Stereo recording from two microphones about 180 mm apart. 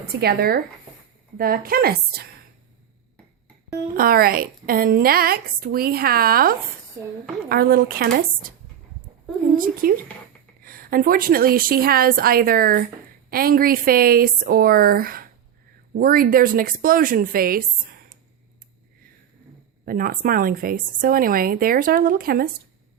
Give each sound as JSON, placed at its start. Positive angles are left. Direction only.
{"t": 0.1, "sound": "a woman's voice", "side_deg": -60}
{"t": 3.9, "sound": "a woman's voice", "side_deg": -55}
{"t": 9.8, "sound": "a woman's voice", "side_deg": -50}
{"t": 19.8, "sound": "a woman's voice", "side_deg": -50}